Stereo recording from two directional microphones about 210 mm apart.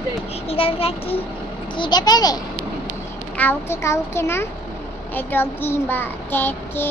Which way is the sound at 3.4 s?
10° left (ahead or behind).